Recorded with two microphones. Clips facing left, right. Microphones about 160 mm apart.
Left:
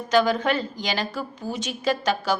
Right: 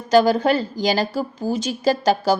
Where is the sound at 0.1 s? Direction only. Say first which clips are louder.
Right 5 dB; 35° right (ahead or behind).